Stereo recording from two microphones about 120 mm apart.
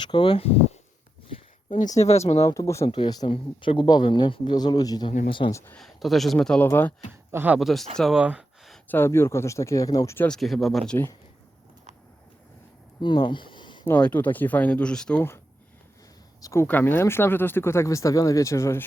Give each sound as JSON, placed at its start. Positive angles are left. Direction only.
{"t": 0.0, "sound": "speech", "side_deg": 40}
{"t": 1.7, "sound": "speech", "side_deg": 90}
{"t": 2.5, "sound": "speech", "side_deg": 25}
{"t": 3.3, "sound": "speech", "side_deg": 45}
{"t": 5.7, "sound": "speech", "side_deg": 0}
{"t": 7.1, "sound": "a man's voice", "side_deg": -20}
{"t": 7.6, "sound": "speech", "side_deg": 0}
{"t": 8.9, "sound": "speech", "side_deg": 20}
{"t": 10.2, "sound": "speech", "side_deg": 5}
{"t": 13.0, "sound": "speech", "side_deg": 40}
{"t": 13.8, "sound": "speech", "side_deg": 15}
{"t": 16.4, "sound": "speech", "side_deg": 25}